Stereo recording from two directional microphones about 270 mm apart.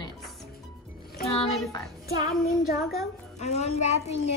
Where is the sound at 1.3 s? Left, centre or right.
Left.